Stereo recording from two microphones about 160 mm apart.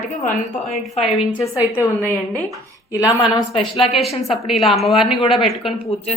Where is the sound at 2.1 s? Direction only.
10° left (ahead or behind).